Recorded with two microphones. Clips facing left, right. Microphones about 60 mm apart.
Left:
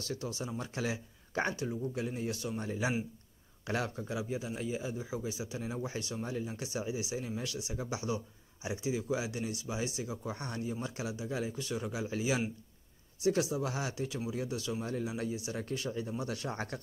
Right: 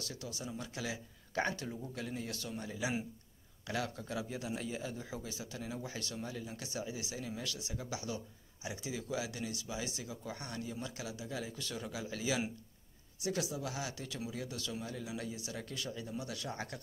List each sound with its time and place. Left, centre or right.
0.1 s speech: left
2.6 s speech: left
4.1 s speech: centre
14.8 s speech: left